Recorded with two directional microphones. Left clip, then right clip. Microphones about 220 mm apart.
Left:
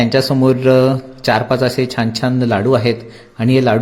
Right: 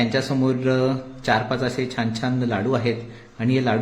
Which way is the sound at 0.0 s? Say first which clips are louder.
Left 9 dB; 30° left (ahead or behind).